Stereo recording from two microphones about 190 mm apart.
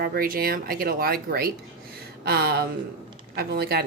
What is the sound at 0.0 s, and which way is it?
A woman's voice, 50° right (ahead or behind).